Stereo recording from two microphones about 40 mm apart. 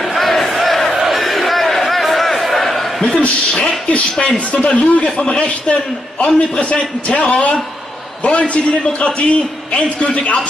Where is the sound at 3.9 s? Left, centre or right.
Left.